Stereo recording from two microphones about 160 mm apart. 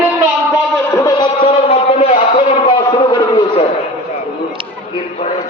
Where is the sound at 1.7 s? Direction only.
40° left (ahead or behind).